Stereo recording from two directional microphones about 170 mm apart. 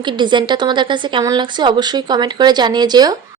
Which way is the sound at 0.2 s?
25° right (ahead or behind).